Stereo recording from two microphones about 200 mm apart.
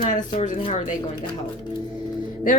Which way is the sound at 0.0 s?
40° left (ahead or behind).